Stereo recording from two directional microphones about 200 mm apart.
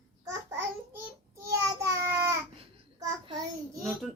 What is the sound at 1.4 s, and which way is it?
Child singing, 15° right (ahead or behind).